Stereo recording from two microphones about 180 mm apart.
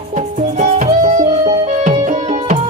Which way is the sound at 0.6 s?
45° right (ahead or behind).